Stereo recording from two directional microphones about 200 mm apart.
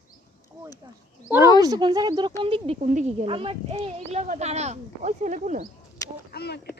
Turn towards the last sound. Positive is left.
turn(degrees=55)  # may be behind; listen again after turning